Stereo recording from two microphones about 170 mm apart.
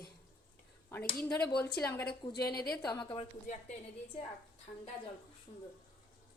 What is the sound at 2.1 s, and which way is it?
Speech, 65° left (ahead or behind).